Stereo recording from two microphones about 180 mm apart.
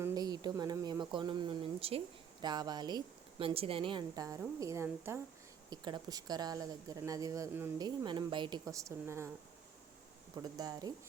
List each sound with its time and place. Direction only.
0.0 s speech: 20° right (ahead or behind)
10.4 s speech: 20° right (ahead or behind)